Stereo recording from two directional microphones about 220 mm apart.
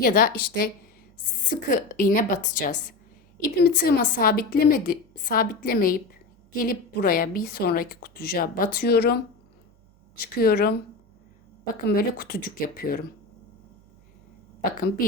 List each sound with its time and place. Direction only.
0.0 s a woman's voice: 40° left (ahead or behind)